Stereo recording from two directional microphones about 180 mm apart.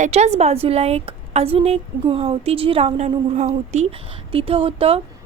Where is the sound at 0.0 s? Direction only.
35° right (ahead or behind).